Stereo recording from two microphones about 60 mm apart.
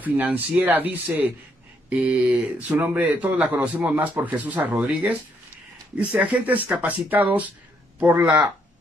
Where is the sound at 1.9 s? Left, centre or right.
Centre.